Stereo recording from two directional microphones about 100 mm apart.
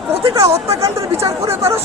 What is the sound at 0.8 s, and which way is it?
Speech, 35° right (ahead or behind).